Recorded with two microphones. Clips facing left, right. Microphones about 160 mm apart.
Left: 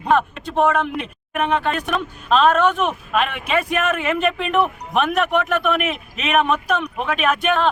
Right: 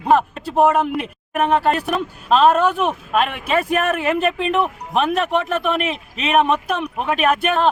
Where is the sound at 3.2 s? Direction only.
35° right (ahead or behind).